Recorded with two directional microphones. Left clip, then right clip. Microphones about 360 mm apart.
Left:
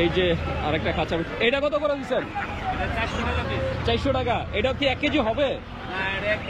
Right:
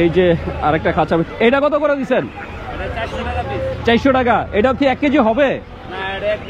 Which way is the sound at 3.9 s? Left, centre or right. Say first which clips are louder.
Right 11 dB; right.